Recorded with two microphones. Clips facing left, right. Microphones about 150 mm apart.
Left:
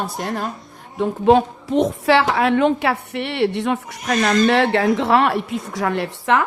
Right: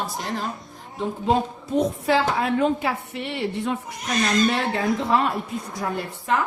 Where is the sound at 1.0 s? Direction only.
75° left (ahead or behind).